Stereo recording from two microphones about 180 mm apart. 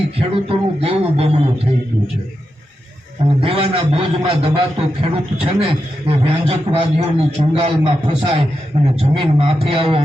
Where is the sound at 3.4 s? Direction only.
30° right (ahead or behind).